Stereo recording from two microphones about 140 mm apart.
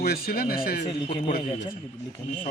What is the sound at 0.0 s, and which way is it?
Speech, 90° left.